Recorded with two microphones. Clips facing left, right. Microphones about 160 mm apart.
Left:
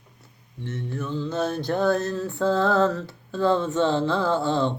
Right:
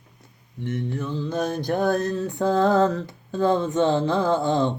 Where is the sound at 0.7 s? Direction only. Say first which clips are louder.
Right 3 dB; 15° right (ahead or behind).